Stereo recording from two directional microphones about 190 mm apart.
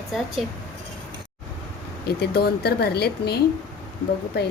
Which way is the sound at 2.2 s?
55° left (ahead or behind).